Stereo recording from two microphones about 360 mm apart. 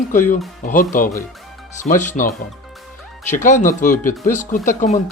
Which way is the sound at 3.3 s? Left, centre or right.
Left.